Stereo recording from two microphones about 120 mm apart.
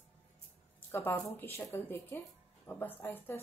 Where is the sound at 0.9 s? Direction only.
20° left (ahead or behind).